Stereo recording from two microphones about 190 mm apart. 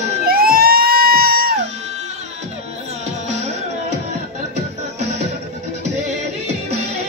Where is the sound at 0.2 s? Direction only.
50° right (ahead or behind).